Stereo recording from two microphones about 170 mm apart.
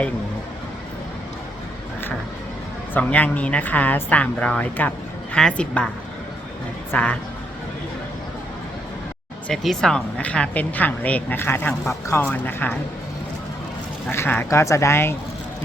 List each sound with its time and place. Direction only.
2.9 s a woman's voice: 10° left (ahead or behind)
6.9 s a woman's voice: 5° left (ahead or behind)
9.5 s a woman's voice: 5° left (ahead or behind)
14.1 s a woman's voice: 15° left (ahead or behind)